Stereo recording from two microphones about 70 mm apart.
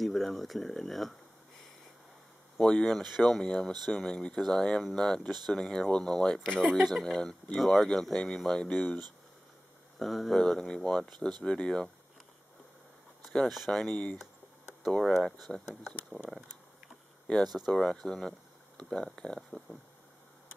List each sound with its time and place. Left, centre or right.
0.0 s speech: centre
2.6 s speech: centre
9.9 s speech: centre
13.7 s speech: centre
14.8 s speech: centre
17.4 s speech: centre